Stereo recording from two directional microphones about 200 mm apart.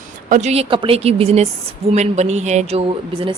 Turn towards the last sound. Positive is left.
turn(degrees=-25)  # may be behind; listen again after turning